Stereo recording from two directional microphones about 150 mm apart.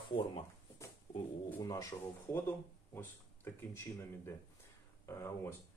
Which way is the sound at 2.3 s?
15° left (ahead or behind).